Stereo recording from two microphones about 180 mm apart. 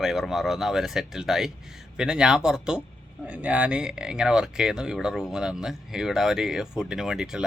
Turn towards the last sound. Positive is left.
turn(degrees=-5)  # may be behind; listen again after turning